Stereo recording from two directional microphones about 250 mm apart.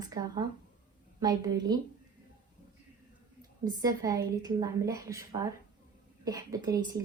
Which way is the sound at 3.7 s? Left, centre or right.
Centre.